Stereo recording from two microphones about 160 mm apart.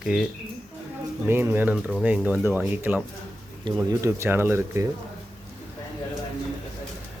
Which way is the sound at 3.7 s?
25° right (ahead or behind).